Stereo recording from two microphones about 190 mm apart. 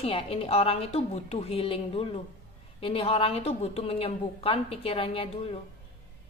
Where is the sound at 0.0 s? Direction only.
30° left (ahead or behind).